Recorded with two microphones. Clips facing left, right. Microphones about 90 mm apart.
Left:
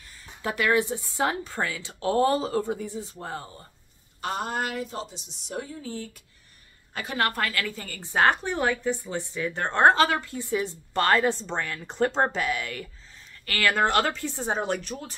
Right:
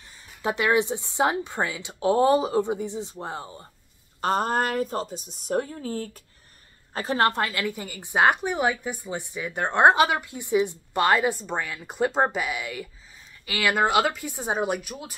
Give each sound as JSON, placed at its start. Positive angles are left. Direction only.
{"t": 0.4, "sound": "a woman's voice", "side_deg": -20}
{"t": 4.2, "sound": "a woman's voice", "side_deg": -40}